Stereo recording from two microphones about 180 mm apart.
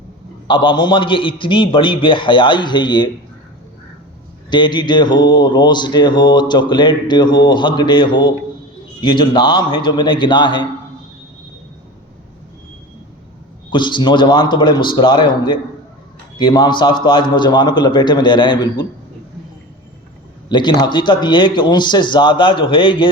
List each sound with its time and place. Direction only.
0.4 s speech: 25° left (ahead or behind)
4.4 s speech: 25° left (ahead or behind)
13.7 s speech: 25° left (ahead or behind)
20.5 s speech: 25° left (ahead or behind)